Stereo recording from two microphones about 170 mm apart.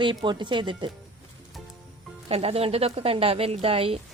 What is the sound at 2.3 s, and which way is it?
A woman's voice, 35° right (ahead or behind).